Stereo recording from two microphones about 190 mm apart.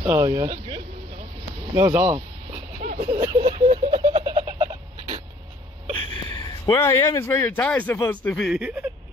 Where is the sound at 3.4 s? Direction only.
35° right (ahead or behind).